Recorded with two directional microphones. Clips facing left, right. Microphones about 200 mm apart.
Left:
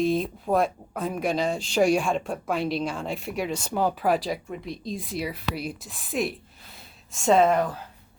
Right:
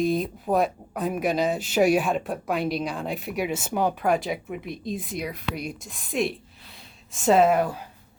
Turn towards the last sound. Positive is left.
turn(degrees=-5)  # may be behind; listen again after turning